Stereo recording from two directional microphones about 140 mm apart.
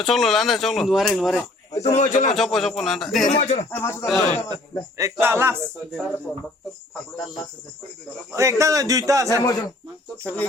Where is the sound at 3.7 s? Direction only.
15° left (ahead or behind).